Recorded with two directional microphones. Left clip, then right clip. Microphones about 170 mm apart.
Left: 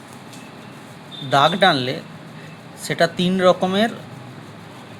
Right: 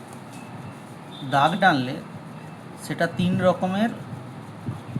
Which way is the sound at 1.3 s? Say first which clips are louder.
Left 4 dB; 40° left (ahead or behind).